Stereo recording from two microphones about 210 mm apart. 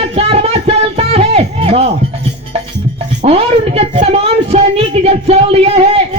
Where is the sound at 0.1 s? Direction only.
30° right (ahead or behind).